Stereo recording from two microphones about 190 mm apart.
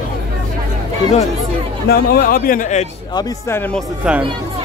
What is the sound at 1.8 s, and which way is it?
Speech, 55° left (ahead or behind).